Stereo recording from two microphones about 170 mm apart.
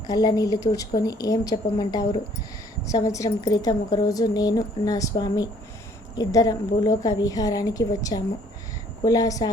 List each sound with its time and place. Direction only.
0.1 s speech: 20° left (ahead or behind)